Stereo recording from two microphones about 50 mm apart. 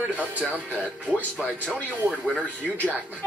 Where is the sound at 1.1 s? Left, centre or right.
Left.